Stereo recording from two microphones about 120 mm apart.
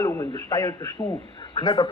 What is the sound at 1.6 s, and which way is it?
Speech, 35° left (ahead or behind).